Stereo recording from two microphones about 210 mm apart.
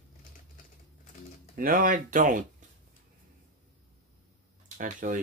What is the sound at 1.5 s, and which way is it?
Speech, 40° right (ahead or behind).